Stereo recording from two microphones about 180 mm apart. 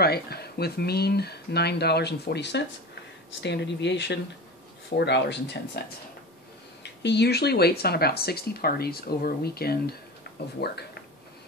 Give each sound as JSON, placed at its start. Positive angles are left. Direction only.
{"t": 0.0, "sound": "speech", "side_deg": 60}
{"t": 6.8, "sound": "speech", "side_deg": 70}